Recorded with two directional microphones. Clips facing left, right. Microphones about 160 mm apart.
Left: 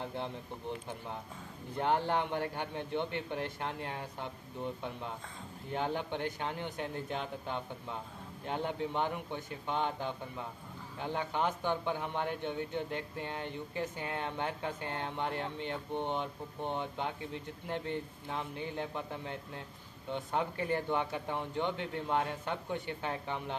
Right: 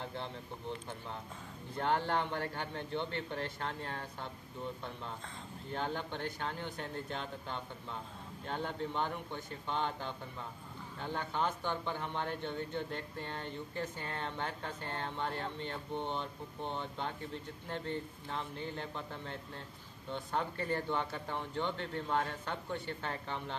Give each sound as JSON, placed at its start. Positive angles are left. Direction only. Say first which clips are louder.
{"t": 1.8, "sound": "speech", "louder": "left 2 dB", "side_deg": 10}
{"t": 5.7, "sound": "speech", "louder": "left 3 dB", "side_deg": 15}